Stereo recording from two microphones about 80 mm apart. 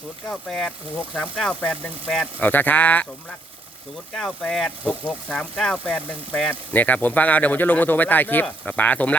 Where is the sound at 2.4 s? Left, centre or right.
Left.